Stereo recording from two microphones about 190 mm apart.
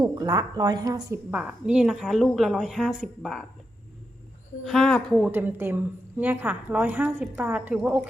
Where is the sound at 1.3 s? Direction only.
5° right (ahead or behind).